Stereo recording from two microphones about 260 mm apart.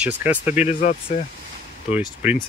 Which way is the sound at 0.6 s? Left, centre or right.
Left.